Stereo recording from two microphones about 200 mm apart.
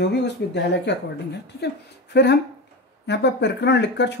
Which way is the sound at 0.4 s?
60° left (ahead or behind).